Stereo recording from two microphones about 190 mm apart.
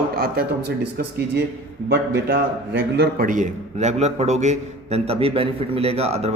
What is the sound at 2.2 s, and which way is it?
A man's voice, 60° right (ahead or behind).